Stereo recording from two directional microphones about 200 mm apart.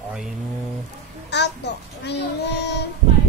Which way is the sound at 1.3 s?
60° left (ahead or behind).